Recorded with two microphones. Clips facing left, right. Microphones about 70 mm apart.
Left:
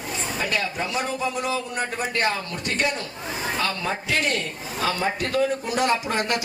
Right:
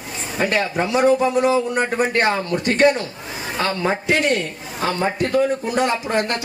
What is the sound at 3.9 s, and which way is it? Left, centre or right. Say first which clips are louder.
Speech: right 8 dB; right.